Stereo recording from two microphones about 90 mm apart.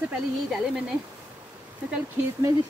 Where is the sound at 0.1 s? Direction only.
5° right (ahead or behind).